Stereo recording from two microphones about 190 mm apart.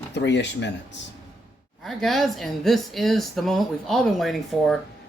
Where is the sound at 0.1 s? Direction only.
65° left (ahead or behind).